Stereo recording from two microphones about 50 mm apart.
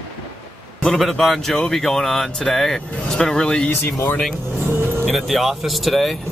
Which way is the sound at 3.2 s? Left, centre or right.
Centre.